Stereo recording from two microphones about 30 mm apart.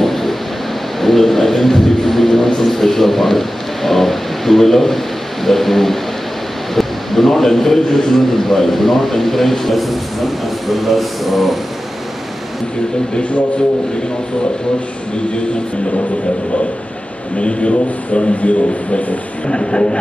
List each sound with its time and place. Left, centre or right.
0.0 s a sound: centre
1.0 s a man's voice: centre
17.4 s speech: left
19.4 s speech: left